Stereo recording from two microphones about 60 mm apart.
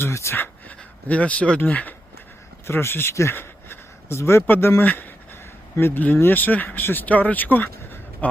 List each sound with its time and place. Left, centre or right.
0.0 s speech: left
0.7 s speech: left
2.6 s speech: left
3.3 s a sound: left
4.4 s speech: left
4.8 s a sound: left
5.8 s speech: left